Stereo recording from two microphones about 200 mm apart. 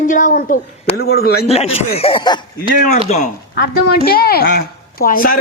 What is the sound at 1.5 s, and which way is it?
Speech, 30° left (ahead or behind).